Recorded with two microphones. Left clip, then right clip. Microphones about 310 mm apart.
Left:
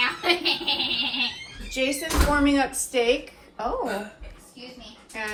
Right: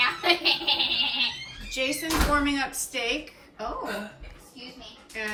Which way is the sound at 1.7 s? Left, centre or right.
Centre.